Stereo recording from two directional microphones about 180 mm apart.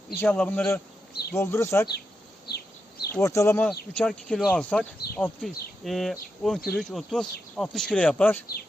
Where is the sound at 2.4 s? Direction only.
60° left (ahead or behind).